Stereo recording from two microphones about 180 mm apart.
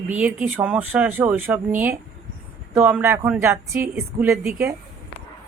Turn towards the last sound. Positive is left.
turn(degrees=-15)  # may be behind; listen again after turning